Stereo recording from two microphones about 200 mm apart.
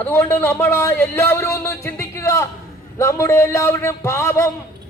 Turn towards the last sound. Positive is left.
turn(degrees=15)  # may be behind; listen again after turning